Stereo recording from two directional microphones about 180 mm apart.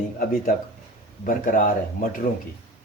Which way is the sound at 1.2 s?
50° left (ahead or behind).